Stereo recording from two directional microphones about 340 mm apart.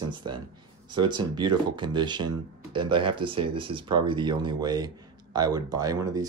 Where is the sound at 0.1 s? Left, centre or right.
Centre.